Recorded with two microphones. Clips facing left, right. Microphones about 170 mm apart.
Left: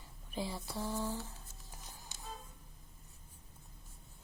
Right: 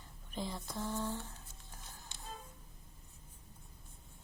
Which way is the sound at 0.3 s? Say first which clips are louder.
Left 1 dB; 5° left (ahead or behind).